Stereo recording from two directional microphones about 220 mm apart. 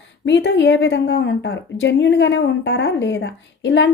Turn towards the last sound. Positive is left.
turn(degrees=55)  # may be behind; listen again after turning